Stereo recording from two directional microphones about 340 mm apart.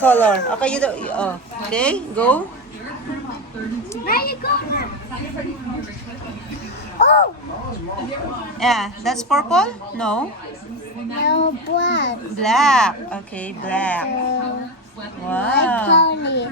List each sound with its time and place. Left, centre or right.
0.0 s a woman's voice: centre
4.0 s children playing: left
7.0 s speech: left
8.5 s a woman's voice: centre
11.3 s a child's voice: left
12.4 s a woman's voice: centre
15.3 s a woman's voice: centre
16.0 s a child's voice: left